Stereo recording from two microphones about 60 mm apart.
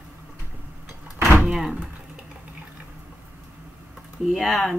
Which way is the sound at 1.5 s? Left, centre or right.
Centre.